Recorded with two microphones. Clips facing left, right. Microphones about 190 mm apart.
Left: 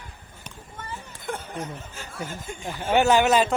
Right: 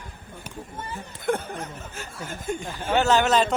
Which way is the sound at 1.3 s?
50° right (ahead or behind).